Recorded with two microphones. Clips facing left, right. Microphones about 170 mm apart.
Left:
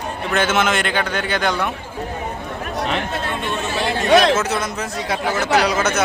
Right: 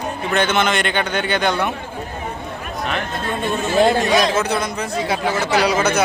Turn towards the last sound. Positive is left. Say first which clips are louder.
# right 1 dB
turn(degrees=0)  # may be behind; listen again after turning